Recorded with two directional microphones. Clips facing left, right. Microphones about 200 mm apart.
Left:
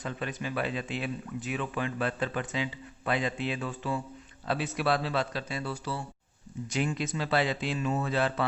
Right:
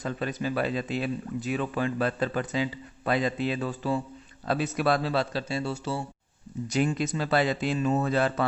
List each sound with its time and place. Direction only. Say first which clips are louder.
0.0 s speech: right 5 dB; 40° right (ahead or behind)
6.7 s speech: right 5 dB; 40° right (ahead or behind)